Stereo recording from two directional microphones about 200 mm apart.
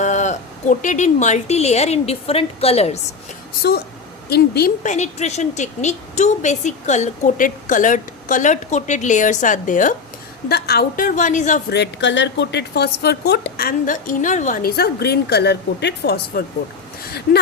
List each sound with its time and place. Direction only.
0.0 s a woman's voice: 35° left (ahead or behind)
4.3 s a woman's voice: 50° left (ahead or behind)
10.5 s a woman's voice: 50° left (ahead or behind)
11.7 s speech: 60° left (ahead or behind)